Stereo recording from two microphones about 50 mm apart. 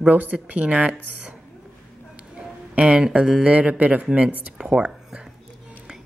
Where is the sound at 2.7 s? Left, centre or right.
Right.